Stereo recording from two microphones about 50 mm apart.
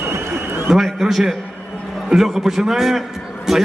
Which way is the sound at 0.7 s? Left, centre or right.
Centre.